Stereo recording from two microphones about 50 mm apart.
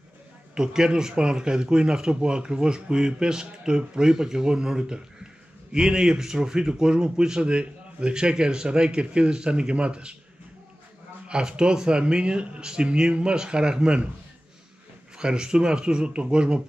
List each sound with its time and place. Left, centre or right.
0.6 s a man's voice: centre
11.2 s a man's voice: centre
15.1 s a man's voice: centre